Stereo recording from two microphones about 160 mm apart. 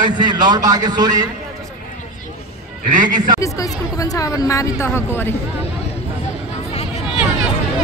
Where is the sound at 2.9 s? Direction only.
55° right (ahead or behind).